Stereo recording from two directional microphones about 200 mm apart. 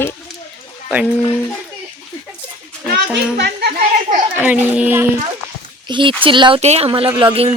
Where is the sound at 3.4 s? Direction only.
50° right (ahead or behind).